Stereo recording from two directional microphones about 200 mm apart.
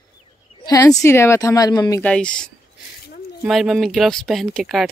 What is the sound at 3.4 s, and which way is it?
Speech, centre (ahead or behind).